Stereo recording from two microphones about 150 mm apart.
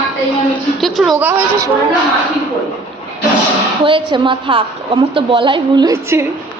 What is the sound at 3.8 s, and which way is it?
A woman's voice, 35° right (ahead or behind).